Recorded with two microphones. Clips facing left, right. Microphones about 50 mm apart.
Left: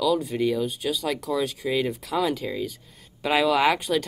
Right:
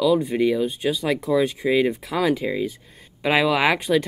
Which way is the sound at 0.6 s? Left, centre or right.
Right.